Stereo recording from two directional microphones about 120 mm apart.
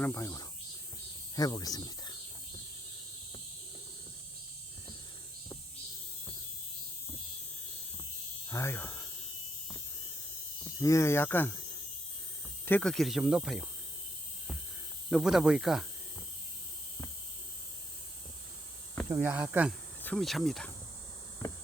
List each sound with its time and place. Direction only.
0.0 s speech: 20° left (ahead or behind)
8.4 s speech: 20° left (ahead or behind)
10.8 s speech: 25° left (ahead or behind)
12.8 s speech: centre (ahead or behind)
15.1 s speech: 5° right (ahead or behind)
19.1 s speech: 15° right (ahead or behind)
20.1 s speech: centre (ahead or behind)